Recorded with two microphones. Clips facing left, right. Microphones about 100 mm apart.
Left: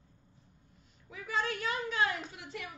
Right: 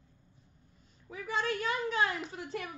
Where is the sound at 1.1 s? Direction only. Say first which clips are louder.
Right 1 dB; 35° right (ahead or behind).